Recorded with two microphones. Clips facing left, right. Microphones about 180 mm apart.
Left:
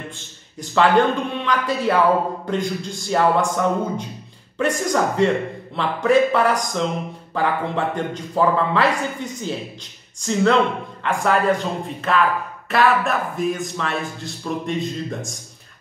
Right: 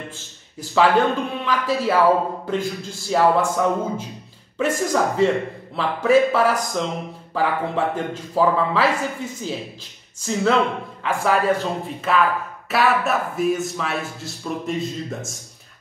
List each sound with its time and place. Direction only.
0.6 s a man's voice: 5° right (ahead or behind)